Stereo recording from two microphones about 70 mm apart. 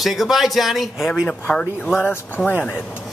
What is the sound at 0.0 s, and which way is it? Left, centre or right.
Speech, centre.